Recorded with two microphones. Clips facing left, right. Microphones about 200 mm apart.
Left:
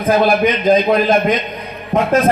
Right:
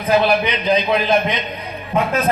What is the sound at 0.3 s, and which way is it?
A man's voice, 45° left (ahead or behind).